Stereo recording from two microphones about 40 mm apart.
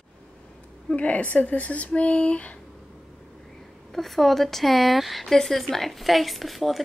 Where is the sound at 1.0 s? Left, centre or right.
Left.